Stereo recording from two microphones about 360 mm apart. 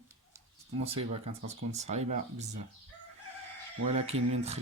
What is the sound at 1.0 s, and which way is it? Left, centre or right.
Speech, right.